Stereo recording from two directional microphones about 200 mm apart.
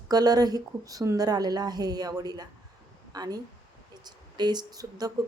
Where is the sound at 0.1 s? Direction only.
20° right (ahead or behind).